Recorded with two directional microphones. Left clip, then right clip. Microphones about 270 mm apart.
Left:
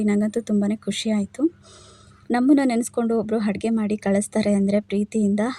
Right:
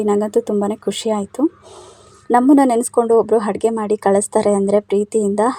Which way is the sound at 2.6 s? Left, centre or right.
Right.